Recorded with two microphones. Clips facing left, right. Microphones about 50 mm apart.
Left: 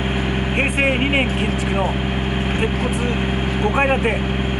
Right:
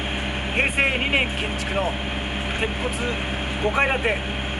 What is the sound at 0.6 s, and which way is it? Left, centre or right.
Speech, centre.